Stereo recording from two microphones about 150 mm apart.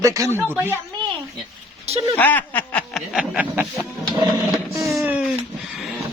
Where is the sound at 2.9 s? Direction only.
5° right (ahead or behind).